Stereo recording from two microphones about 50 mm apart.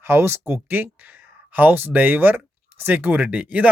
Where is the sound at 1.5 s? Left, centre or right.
Right.